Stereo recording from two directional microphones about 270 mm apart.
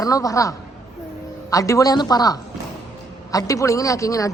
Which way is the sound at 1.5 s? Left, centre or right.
Centre.